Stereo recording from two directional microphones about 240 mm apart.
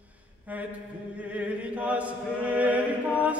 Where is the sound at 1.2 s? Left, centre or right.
Centre.